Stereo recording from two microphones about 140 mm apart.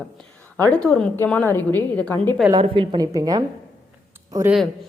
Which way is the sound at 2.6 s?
40° right (ahead or behind).